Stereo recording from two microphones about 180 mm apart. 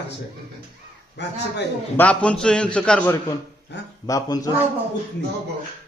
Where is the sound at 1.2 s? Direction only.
75° left (ahead or behind).